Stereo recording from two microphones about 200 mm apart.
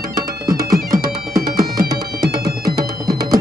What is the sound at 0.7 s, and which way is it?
Music, 45° right (ahead or behind).